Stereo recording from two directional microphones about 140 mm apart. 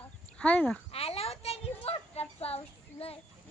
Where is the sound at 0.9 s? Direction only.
45° left (ahead or behind).